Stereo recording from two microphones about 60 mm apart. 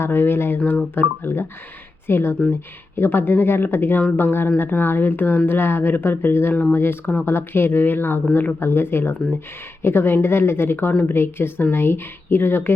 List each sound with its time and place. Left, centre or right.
0.0 s speech: left
7.0 s speech: left
7.3 s speech: left